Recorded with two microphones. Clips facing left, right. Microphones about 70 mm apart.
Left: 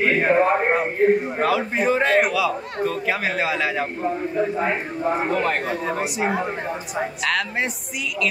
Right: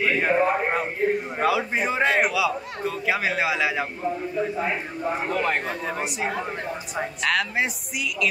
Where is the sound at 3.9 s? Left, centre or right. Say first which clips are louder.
Left 4 dB; left.